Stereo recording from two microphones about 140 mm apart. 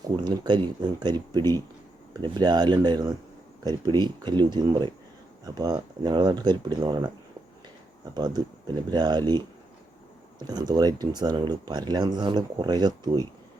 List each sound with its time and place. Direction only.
0.1 s speech: 35° right (ahead or behind)
8.1 s speech: 30° right (ahead or behind)
10.4 s speech: 30° right (ahead or behind)